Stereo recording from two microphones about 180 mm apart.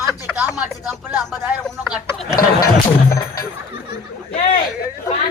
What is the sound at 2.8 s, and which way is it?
Speech, 15° left (ahead or behind).